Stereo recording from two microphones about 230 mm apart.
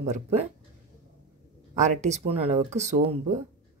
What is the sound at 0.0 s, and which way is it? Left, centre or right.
Speech, right.